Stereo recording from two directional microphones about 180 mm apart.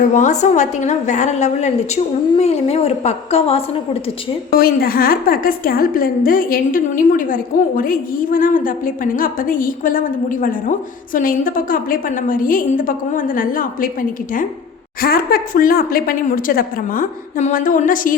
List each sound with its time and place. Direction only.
0.1 s a woman's voice: 40° left (ahead or behind)
4.5 s a woman's voice: 55° left (ahead or behind)
15.0 s a woman's voice: 55° left (ahead or behind)